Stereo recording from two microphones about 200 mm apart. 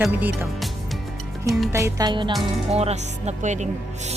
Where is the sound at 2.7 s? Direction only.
30° right (ahead or behind).